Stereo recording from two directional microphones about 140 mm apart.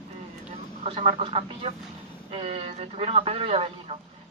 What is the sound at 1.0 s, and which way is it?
Speech, 45° right (ahead or behind).